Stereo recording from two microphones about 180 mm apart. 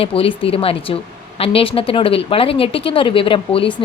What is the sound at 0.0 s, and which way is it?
Speech, 30° left (ahead or behind).